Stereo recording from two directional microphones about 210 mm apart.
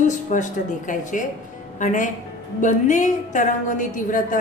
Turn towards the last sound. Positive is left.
turn(degrees=40)  # may be behind; listen again after turning